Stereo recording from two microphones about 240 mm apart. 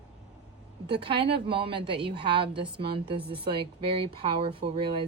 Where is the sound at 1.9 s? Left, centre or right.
Right.